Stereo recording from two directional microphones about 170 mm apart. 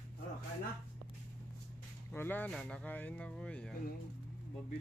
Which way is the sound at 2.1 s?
10° left (ahead or behind).